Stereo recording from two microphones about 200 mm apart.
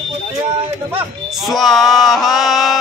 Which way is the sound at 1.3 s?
Centre (ahead or behind).